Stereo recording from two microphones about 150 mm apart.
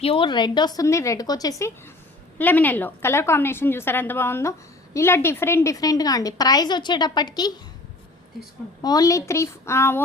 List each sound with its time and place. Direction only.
0.0 s a woman's voice: 35° left (ahead or behind)
2.4 s a woman's voice: 10° left (ahead or behind); by 7.5 s 25° left (ahead or behind)
8.8 s a woman's voice: 25° left (ahead or behind)